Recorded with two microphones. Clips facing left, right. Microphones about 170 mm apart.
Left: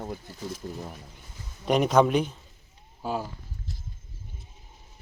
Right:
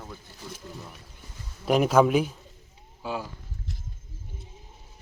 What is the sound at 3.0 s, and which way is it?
Speech, 40° left (ahead or behind).